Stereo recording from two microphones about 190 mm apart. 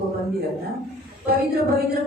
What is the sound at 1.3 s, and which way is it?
Speech, 55° right (ahead or behind).